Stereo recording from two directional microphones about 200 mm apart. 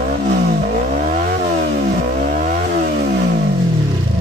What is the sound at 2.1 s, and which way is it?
Chainsaw, 50° right (ahead or behind).